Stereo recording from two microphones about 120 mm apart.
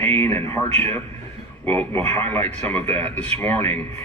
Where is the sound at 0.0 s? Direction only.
15° left (ahead or behind).